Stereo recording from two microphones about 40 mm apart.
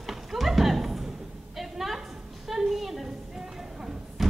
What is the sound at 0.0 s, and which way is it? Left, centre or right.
Horse, centre.